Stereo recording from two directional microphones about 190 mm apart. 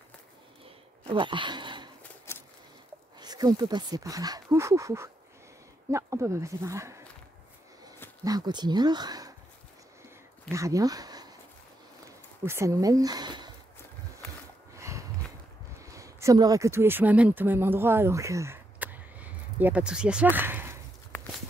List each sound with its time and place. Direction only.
1.0 s speech: 25° right (ahead or behind)
2.3 s a sound: 15° left (ahead or behind)
3.2 s speech: 20° right (ahead or behind)
8.2 s speech: 20° right (ahead or behind)
10.5 s speech: 15° right (ahead or behind)
12.4 s speech: 15° right (ahead or behind)
14.8 s a sound: 15° right (ahead or behind)
15.9 s speech: 15° right (ahead or behind)